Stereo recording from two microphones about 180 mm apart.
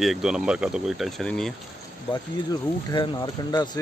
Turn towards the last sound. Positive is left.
turn(degrees=25)  # may be behind; listen again after turning